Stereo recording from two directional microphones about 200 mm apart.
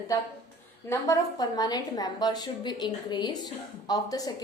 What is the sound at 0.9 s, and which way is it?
A woman's voice, 15° left (ahead or behind).